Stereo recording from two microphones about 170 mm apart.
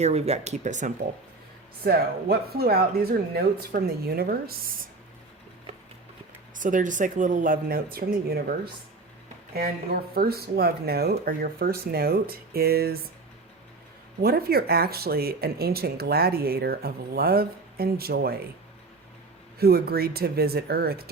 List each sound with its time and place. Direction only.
0.0 s speech: 40° right (ahead or behind)
1.8 s speech: 65° right (ahead or behind)
6.5 s speech: 50° right (ahead or behind)
9.6 s speech: 60° right (ahead or behind)
14.2 s speech: 65° right (ahead or behind)
19.5 s speech: 65° right (ahead or behind)